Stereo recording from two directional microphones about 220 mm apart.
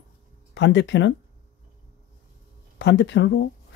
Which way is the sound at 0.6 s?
55° left (ahead or behind).